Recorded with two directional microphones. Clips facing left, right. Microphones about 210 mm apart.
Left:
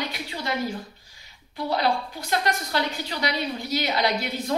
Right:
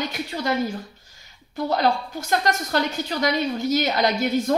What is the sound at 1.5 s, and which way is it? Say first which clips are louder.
A woman's voice: right 3 dB; 45° right (ahead or behind).